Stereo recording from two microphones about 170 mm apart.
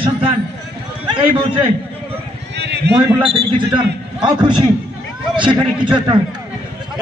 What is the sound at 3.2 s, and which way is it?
A man's voice, 30° right (ahead or behind).